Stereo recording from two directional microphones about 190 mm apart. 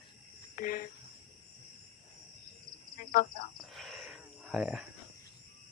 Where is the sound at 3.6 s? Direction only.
Centre (ahead or behind).